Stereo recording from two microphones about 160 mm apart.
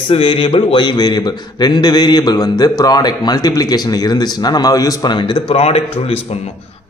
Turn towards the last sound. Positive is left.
turn(degrees=35)  # may be behind; listen again after turning